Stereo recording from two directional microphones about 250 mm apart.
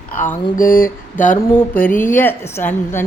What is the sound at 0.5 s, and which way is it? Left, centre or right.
Mantra, left.